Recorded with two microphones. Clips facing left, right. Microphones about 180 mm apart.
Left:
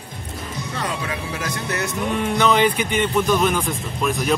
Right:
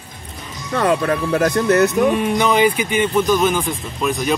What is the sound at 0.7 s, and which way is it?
Speech, 60° right (ahead or behind).